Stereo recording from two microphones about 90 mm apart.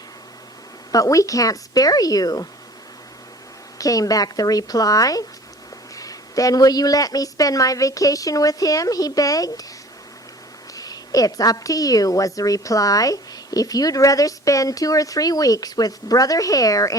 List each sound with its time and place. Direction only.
0.9 s a woman's voice: 40° left (ahead or behind)
3.8 s a woman's voice: 40° left (ahead or behind)
10.8 s a woman's voice: 45° left (ahead or behind)